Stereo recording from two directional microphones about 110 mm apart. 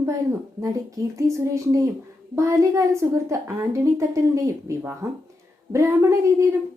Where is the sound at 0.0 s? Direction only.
25° right (ahead or behind).